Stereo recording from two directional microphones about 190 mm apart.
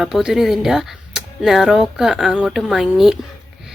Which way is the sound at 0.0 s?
Centre (ahead or behind).